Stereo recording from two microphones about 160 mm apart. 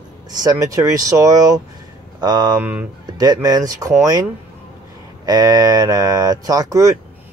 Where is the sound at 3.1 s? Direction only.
25° right (ahead or behind).